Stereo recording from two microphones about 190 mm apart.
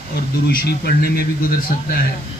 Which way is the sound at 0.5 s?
50° left (ahead or behind).